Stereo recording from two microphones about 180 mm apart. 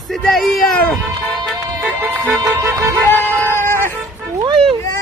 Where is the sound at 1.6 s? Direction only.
15° right (ahead or behind).